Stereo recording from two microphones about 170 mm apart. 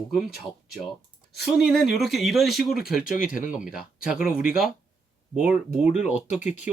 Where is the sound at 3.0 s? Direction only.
55° left (ahead or behind).